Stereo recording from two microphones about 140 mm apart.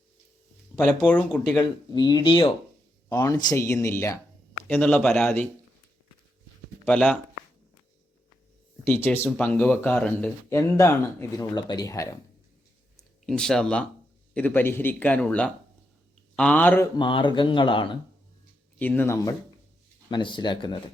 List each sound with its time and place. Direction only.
1.0 s speech: 10° left (ahead or behind)
1.9 s speech: 30° left (ahead or behind)
3.1 s speech: 25° left (ahead or behind)
4.7 s speech: 10° left (ahead or behind)
6.8 s speech: 5° left (ahead or behind)
8.8 s speech: 15° left (ahead or behind)
10.5 s speech: 20° left (ahead or behind)
13.0 s speech: 5° left (ahead or behind)
17.0 s speech: 35° left (ahead or behind)
18.8 s speech: 15° left (ahead or behind)
20.1 s speech: 35° left (ahead or behind)